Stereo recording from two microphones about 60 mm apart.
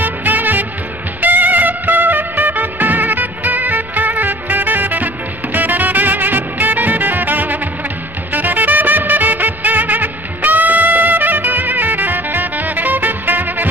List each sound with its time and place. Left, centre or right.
0.0 s music: right